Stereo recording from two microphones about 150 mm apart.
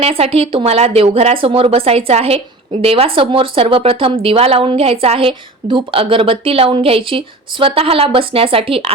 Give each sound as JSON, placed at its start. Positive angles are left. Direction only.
{"t": 0.0, "sound": "speech", "side_deg": -40}